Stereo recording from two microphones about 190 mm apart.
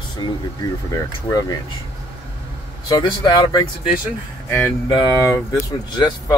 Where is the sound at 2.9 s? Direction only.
20° left (ahead or behind).